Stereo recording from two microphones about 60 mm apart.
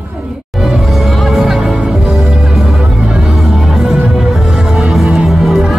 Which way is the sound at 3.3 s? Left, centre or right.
Centre.